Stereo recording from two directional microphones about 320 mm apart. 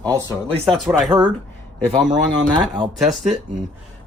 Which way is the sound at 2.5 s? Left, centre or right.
Centre.